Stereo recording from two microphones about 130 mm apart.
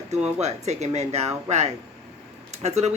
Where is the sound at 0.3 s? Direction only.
60° right (ahead or behind).